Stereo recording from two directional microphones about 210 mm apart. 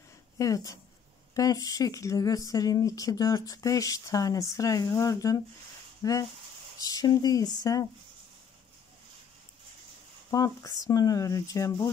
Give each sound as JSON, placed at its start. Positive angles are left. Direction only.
{"t": 0.4, "sound": "speech", "side_deg": 15}
{"t": 10.3, "sound": "speech", "side_deg": 15}